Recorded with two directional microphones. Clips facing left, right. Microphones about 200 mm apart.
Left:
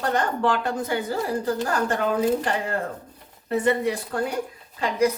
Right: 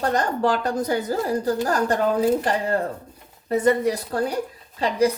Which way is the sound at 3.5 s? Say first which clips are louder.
Right 3 dB; 40° right (ahead or behind).